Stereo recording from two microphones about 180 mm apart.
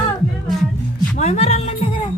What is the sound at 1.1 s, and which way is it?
Music, 35° left (ahead or behind).